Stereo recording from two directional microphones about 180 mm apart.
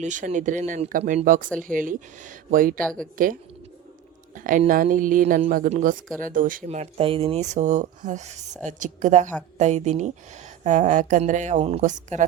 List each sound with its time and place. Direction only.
0.0 s speech: 40° right (ahead or behind)
4.4 s speech: 45° right (ahead or behind)
6.7 s speech: 35° right (ahead or behind)